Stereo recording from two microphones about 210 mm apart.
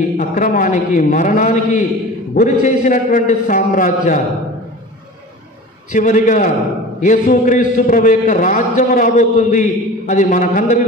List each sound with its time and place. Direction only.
0.3 s a man's voice: 40° left (ahead or behind)
5.9 s a man's voice: 35° left (ahead or behind)